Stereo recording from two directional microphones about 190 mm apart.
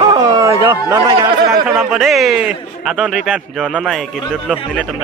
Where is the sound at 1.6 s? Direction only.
Centre (ahead or behind).